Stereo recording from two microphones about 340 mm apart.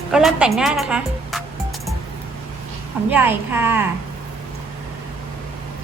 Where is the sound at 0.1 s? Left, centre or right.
Centre.